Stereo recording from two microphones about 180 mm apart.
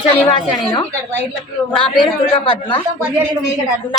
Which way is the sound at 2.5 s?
30° left (ahead or behind).